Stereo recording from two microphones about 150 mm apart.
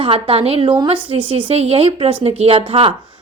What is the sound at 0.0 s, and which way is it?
Speech, 40° right (ahead or behind).